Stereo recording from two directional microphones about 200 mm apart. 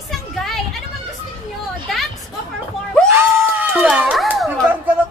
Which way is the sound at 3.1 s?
10° right (ahead or behind).